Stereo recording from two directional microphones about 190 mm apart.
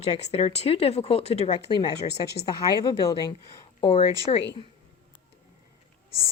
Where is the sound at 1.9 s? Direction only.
60° left (ahead or behind).